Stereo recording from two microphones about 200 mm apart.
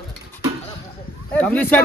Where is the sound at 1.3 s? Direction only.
10° left (ahead or behind).